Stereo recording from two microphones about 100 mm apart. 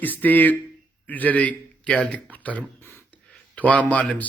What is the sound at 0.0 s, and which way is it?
Speech, 15° left (ahead or behind).